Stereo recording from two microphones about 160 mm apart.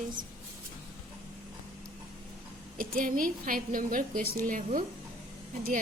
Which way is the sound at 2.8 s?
60° right (ahead or behind).